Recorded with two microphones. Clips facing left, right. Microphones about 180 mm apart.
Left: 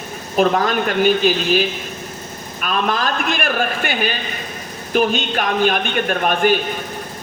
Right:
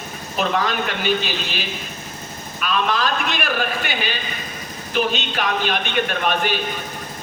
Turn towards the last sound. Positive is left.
turn(degrees=50)  # may be behind; listen again after turning